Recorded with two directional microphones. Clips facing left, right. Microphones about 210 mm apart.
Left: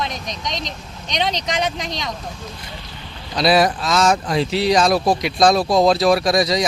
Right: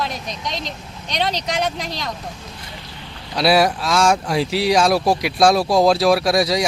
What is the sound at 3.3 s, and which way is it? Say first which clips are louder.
Speech: even; 5° right (ahead or behind).